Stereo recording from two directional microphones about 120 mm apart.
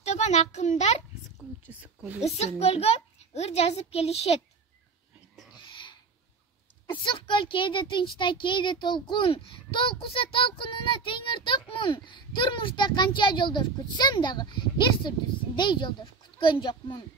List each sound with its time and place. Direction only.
0.0 s a child's voice: 65° left (ahead or behind)
1.7 s speech: 10° right (ahead or behind)
2.2 s a child's voice: 60° left (ahead or behind)
5.5 s a sound: 40° left (ahead or behind)
6.9 s a child's voice: 45° left (ahead or behind)